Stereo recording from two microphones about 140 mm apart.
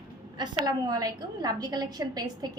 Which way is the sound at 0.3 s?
30° right (ahead or behind).